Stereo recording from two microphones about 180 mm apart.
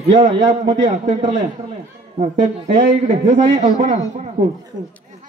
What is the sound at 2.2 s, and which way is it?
A man's voice, 40° right (ahead or behind).